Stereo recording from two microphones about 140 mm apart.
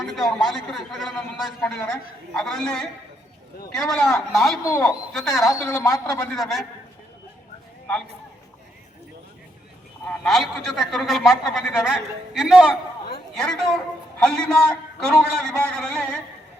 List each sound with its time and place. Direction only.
0.1 s a man's voice: centre (ahead or behind)
4.6 s a man's voice: 20° left (ahead or behind)
5.1 s a man's voice: 5° left (ahead or behind)
5.6 s a man's voice: 20° left (ahead or behind)
6.3 s a man's voice: centre (ahead or behind)
10.1 s a man's voice: centre (ahead or behind)